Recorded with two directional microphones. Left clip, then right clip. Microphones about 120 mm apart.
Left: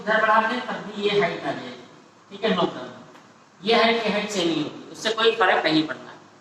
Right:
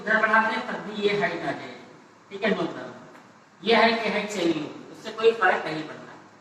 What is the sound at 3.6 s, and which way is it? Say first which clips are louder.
A man's voice: left 1 dB; 35° left (ahead or behind).